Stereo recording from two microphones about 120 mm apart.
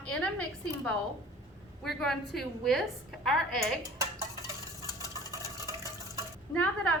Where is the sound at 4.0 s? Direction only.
30° right (ahead or behind).